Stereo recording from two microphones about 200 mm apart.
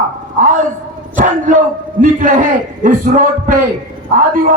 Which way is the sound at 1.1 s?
40° right (ahead or behind).